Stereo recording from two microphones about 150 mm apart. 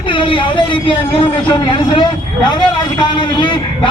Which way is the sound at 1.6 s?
30° left (ahead or behind).